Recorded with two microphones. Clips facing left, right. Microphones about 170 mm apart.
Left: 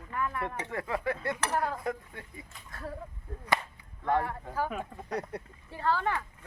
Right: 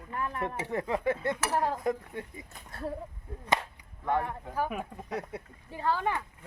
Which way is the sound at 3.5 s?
15° right (ahead or behind).